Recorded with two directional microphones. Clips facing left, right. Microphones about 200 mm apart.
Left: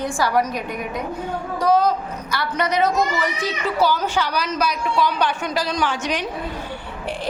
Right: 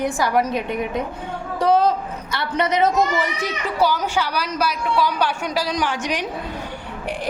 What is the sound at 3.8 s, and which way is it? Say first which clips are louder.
A woman's voice: even; 10° right (ahead or behind).